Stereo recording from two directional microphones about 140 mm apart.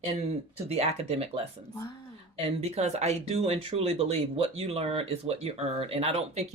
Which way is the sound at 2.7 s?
50° right (ahead or behind).